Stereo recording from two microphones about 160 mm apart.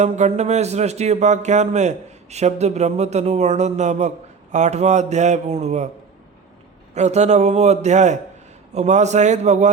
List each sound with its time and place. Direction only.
0.0 s speech: 45° right (ahead or behind)
6.9 s speech: 45° right (ahead or behind)